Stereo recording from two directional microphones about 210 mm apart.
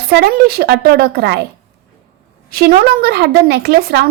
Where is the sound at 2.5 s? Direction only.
45° right (ahead or behind).